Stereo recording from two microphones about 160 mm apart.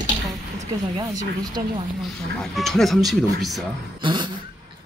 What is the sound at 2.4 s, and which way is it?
Speech, centre (ahead or behind).